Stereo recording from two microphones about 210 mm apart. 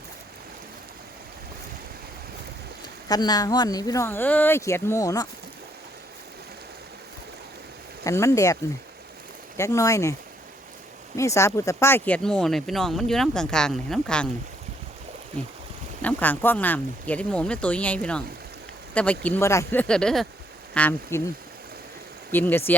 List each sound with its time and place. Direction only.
3.1 s speech: 20° left (ahead or behind)
8.0 s speech: 15° left (ahead or behind)
9.6 s speech: 15° left (ahead or behind)
11.2 s speech: 15° left (ahead or behind)
16.0 s speech: 10° left (ahead or behind)
22.3 s speech: 10° left (ahead or behind)